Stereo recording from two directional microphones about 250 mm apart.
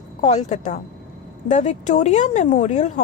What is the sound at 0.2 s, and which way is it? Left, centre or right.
A woman's voice, left.